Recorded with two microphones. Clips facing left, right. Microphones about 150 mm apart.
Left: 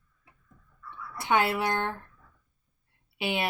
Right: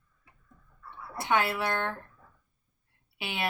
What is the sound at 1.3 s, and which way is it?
Speech, 20° left (ahead or behind).